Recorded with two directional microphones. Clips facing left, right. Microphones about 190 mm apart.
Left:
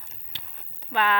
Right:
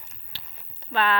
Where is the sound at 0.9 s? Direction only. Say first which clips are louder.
Right 1 dB; 15° left (ahead or behind).